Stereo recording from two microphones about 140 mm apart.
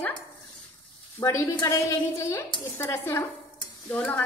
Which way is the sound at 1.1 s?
20° left (ahead or behind).